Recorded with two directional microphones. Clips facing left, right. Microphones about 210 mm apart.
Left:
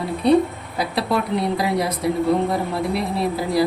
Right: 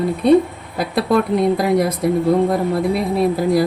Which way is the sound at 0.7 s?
55° right (ahead or behind).